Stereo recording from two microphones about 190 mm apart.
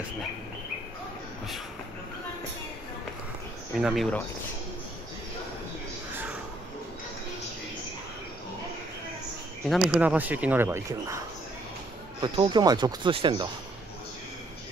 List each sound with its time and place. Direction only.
3.7 s speech: centre (ahead or behind)
9.7 s speech: 5° right (ahead or behind); by 13.5 s 25° right (ahead or behind)